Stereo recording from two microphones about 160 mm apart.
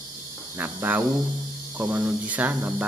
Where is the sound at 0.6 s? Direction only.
15° right (ahead or behind).